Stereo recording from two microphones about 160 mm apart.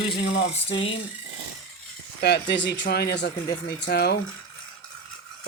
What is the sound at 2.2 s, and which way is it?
Speech, 90° left.